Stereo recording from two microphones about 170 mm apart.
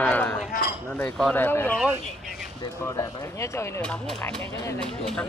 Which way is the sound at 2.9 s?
15° left (ahead or behind).